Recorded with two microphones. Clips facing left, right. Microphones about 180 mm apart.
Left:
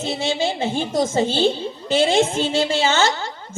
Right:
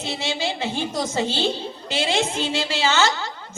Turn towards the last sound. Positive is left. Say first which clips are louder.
# left 2 dB
turn(degrees=50)  # may be behind; listen again after turning